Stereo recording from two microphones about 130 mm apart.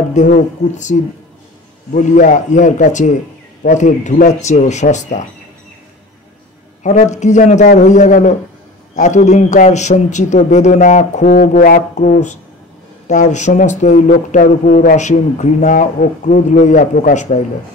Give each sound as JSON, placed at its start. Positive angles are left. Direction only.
{"t": 0.1, "sound": "speech", "side_deg": 70}
{"t": 2.0, "sound": "speech", "side_deg": 75}
{"t": 6.8, "sound": "speech", "side_deg": 65}